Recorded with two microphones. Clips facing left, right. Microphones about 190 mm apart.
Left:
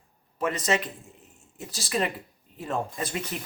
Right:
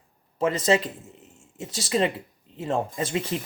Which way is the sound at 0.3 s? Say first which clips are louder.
Right 5 dB; 25° right (ahead or behind).